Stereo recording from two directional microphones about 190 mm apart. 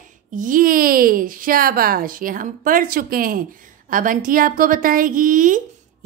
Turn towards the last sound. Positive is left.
turn(degrees=-45)  # may be behind; listen again after turning